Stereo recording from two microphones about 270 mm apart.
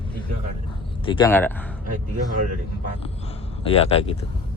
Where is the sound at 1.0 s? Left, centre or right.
Centre.